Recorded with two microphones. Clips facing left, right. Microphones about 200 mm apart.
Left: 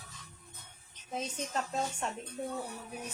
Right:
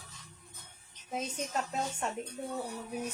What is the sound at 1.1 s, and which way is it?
Speech, 10° right (ahead or behind).